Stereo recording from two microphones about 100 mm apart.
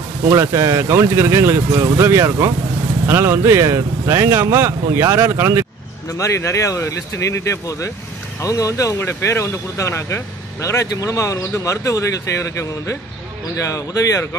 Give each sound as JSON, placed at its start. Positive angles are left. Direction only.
{"t": 0.3, "sound": "speech", "side_deg": -30}
{"t": 6.1, "sound": "speech", "side_deg": 30}